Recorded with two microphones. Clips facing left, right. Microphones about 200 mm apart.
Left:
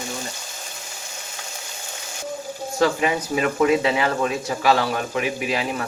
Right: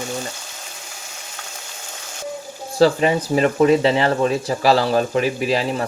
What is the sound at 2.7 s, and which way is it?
Speech, 35° right (ahead or behind).